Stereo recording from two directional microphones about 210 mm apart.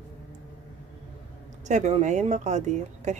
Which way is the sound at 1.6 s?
35° right (ahead or behind).